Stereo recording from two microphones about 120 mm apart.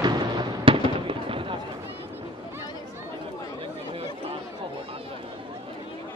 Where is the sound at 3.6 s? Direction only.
50° right (ahead or behind).